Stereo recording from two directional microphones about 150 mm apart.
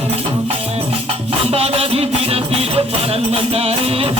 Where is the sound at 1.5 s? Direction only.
40° right (ahead or behind).